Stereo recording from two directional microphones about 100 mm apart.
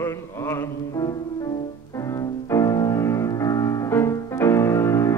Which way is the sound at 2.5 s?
35° left (ahead or behind).